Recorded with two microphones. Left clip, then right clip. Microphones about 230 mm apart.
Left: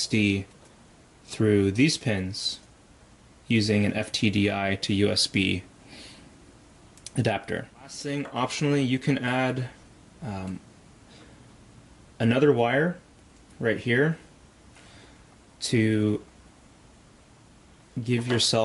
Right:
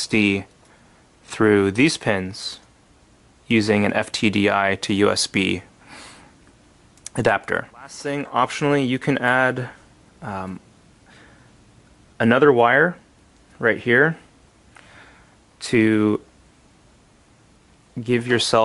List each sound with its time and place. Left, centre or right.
1.2 s speech: centre
7.0 s computer keyboard: centre
7.4 s speech: centre
12.2 s speech: centre
15.6 s speech: centre
18.0 s speech: centre